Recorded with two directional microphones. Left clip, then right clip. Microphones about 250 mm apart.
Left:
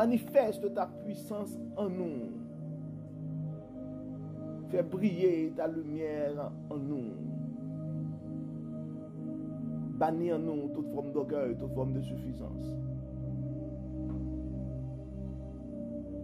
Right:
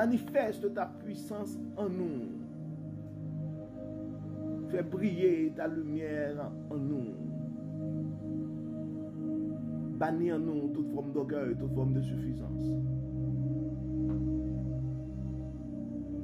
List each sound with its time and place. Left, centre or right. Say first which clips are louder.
0.0 s a man's voice: left 3 dB; centre
4.6 s speech: left 4 dB; centre
9.9 s a man's voice: left 1 dB; centre